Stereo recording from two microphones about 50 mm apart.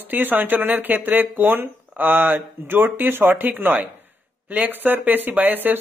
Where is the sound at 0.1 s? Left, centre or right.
Right.